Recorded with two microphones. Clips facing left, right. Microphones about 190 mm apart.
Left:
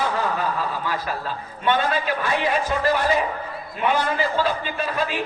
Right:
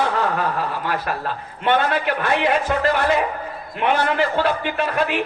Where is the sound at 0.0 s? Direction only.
65° right (ahead or behind).